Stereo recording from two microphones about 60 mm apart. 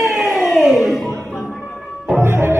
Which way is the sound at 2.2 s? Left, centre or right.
Right.